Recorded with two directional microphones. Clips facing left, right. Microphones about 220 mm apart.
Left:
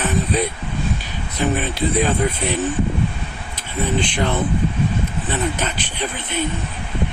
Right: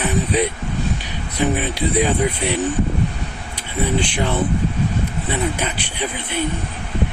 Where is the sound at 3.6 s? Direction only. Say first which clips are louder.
Right 1 dB; 10° right (ahead or behind).